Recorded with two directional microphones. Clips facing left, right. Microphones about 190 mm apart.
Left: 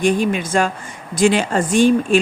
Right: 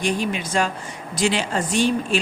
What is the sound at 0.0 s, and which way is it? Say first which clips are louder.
A man's voice: left 6 dB; 50° left (ahead or behind).